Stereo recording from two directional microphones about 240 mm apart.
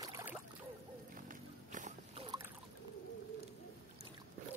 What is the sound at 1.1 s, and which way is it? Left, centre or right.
Music, right.